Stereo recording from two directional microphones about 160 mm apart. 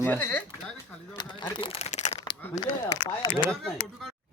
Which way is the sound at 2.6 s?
25° left (ahead or behind).